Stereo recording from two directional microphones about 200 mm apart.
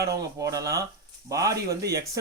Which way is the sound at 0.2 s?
15° right (ahead or behind).